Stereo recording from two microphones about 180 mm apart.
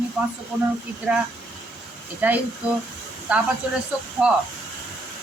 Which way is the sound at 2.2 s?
10° right (ahead or behind).